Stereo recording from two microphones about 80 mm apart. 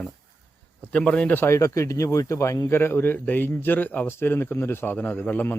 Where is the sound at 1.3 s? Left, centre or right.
Left.